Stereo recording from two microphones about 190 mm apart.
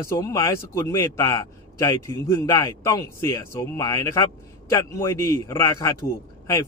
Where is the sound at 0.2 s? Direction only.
15° left (ahead or behind).